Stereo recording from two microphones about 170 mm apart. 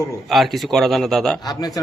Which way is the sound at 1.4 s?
25° left (ahead or behind).